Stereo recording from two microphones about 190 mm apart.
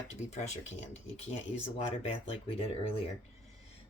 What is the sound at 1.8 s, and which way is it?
Speech, 35° left (ahead or behind).